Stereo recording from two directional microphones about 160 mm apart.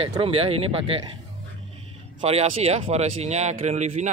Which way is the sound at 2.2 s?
40° right (ahead or behind).